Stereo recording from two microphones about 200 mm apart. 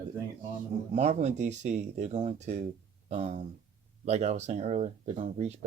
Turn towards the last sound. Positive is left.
turn(degrees=-35)  # may be behind; listen again after turning